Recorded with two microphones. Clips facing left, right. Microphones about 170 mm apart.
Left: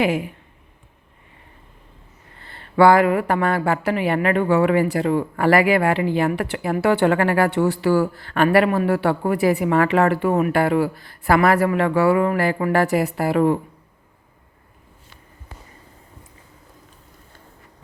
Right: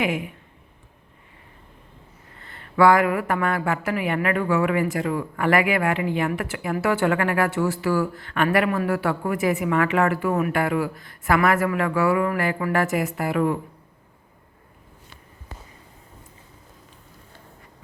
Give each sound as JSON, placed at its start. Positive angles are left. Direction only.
{"t": 2.4, "sound": "speech", "side_deg": 30}